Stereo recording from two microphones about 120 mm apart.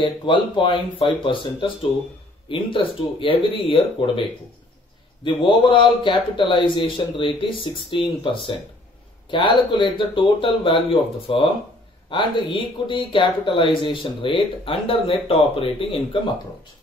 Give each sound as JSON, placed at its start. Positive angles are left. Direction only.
{"t": 0.0, "sound": "speech", "side_deg": 45}
{"t": 5.2, "sound": "speech", "side_deg": 45}